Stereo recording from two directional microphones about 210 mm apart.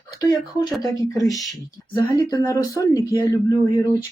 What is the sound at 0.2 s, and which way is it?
Speech, 15° left (ahead or behind).